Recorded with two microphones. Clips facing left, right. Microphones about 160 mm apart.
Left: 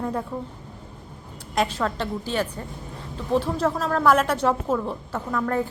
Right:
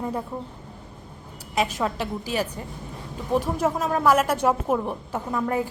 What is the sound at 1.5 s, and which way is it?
A woman's voice, 10° right (ahead or behind).